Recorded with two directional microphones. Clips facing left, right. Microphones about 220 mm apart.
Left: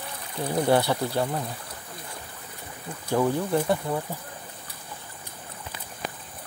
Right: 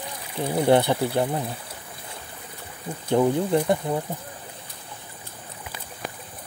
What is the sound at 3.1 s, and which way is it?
Speech, 20° right (ahead or behind).